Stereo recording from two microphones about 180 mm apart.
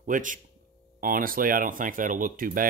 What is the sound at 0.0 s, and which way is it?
Speech, 45° right (ahead or behind).